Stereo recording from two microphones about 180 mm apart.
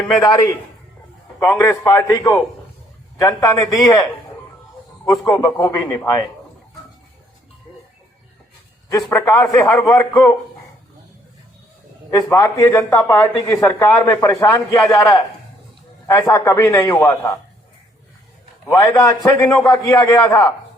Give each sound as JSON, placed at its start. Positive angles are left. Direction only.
{"t": 0.3, "sound": "a man's voice", "side_deg": 20}
{"t": 5.2, "sound": "speech", "side_deg": 15}
{"t": 8.9, "sound": "speech", "side_deg": 20}
{"t": 12.1, "sound": "a man's voice", "side_deg": 15}
{"t": 18.6, "sound": "speech", "side_deg": 20}